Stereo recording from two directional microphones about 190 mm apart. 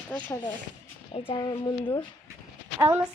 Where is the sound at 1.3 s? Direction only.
20° left (ahead or behind).